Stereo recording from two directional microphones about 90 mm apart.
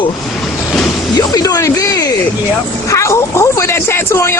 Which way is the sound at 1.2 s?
45° left (ahead or behind).